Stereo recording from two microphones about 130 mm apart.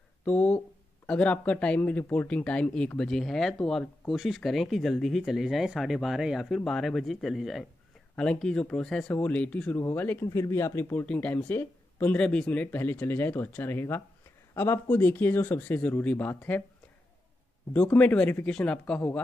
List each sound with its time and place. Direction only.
0.2 s speech: 10° left (ahead or behind)
17.9 s speech: 10° left (ahead or behind)